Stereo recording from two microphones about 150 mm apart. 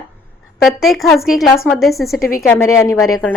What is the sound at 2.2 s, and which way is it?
Speech, 75° left (ahead or behind).